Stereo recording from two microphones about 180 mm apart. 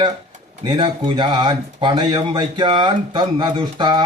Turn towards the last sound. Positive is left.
turn(degrees=-25)  # may be behind; listen again after turning